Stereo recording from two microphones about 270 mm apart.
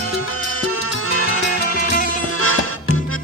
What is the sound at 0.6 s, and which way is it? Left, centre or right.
Music, left.